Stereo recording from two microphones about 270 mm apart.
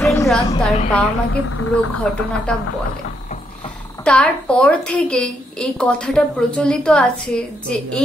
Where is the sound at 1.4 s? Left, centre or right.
Left.